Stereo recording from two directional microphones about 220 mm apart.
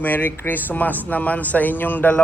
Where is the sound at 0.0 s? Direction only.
10° left (ahead or behind).